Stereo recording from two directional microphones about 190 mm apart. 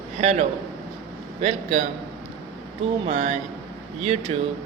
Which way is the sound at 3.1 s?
40° right (ahead or behind).